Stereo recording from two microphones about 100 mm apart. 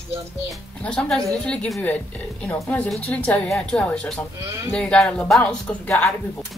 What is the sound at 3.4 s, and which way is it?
A woman's voice, 5° left (ahead or behind).